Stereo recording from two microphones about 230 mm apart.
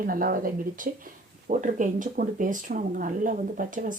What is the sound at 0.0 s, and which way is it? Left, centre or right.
Speech, right.